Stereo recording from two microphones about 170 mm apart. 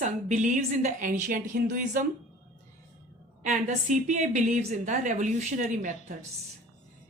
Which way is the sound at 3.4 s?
45° right (ahead or behind).